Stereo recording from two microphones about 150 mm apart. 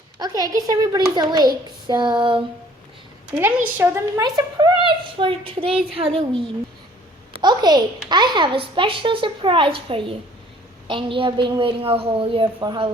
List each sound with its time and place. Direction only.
0.2 s a child's voice: 25° right (ahead or behind)
3.3 s a woman's voice: 10° right (ahead or behind); by 6.2 s 40° right (ahead or behind)
7.3 s a woman's voice: 30° right (ahead or behind)